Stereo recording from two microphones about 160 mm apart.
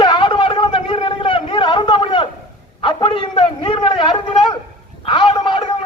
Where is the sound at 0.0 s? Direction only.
30° left (ahead or behind).